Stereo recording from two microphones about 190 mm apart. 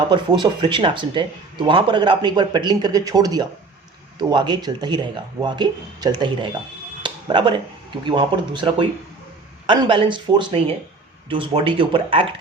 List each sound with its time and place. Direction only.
0.1 s speech: 25° right (ahead or behind)
7.0 s a sound: 25° right (ahead or behind)
8.0 s speech: 25° right (ahead or behind)